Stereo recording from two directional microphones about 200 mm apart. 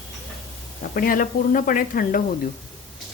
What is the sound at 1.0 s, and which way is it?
Speech, 45° left (ahead or behind).